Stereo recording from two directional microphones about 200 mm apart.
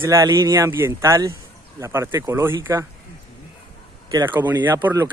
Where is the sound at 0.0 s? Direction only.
15° right (ahead or behind).